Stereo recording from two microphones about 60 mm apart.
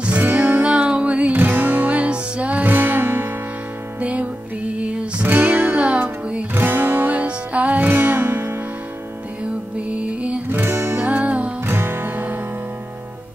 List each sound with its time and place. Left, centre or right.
0.0 s music: right
1.4 s music: right
4.0 s music: right
9.8 s music: right
10.5 s music: right
11.0 s music: right
11.6 s music: right